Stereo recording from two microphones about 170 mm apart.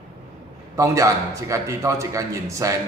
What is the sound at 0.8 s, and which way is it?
A man's voice, 20° right (ahead or behind).